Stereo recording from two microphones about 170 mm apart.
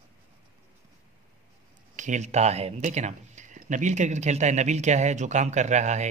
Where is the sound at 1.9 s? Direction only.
45° right (ahead or behind).